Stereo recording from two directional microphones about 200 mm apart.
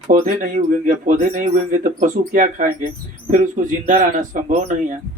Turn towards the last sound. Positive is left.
turn(degrees=-40)  # may be behind; listen again after turning